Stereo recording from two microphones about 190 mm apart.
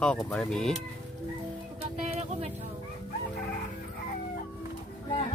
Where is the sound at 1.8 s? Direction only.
35° right (ahead or behind).